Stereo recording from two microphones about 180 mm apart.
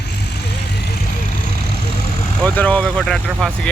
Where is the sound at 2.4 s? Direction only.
5° left (ahead or behind).